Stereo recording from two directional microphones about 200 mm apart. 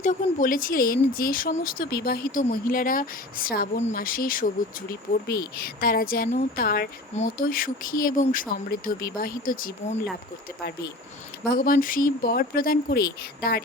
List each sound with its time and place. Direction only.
0.0 s speech: 40° left (ahead or behind)
5.5 s speech: 50° left (ahead or behind)
11.4 s speech: 45° left (ahead or behind)